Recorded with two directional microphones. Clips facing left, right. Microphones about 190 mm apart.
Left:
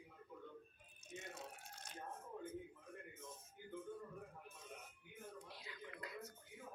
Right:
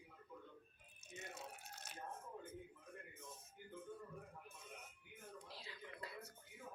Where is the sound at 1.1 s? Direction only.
5° right (ahead or behind).